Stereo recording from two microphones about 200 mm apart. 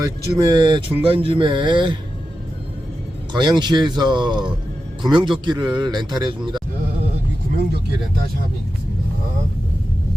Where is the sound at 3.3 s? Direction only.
20° right (ahead or behind).